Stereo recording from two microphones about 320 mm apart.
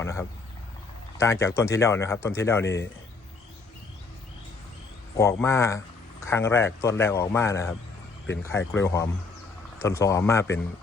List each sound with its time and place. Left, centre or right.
0.0 s speech: centre
5.1 s speech: centre